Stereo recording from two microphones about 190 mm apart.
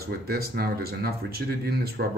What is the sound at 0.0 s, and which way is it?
Speech, 55° right (ahead or behind).